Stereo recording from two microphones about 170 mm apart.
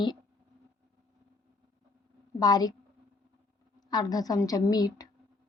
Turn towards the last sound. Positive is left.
turn(degrees=20)  # may be behind; listen again after turning